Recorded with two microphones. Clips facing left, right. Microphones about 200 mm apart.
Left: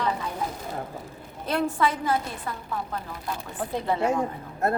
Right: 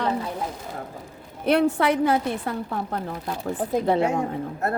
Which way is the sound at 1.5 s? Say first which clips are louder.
Right 5 dB; 65° right (ahead or behind).